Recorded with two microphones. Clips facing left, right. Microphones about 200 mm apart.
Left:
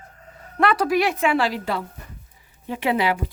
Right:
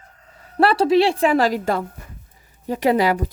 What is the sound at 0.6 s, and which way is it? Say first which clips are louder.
A woman's voice: right 4 dB; 30° right (ahead or behind).